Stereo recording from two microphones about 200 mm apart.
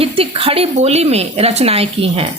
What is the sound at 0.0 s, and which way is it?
Speech, 30° right (ahead or behind).